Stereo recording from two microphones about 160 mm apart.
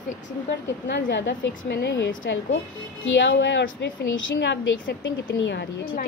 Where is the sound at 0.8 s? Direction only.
90° left.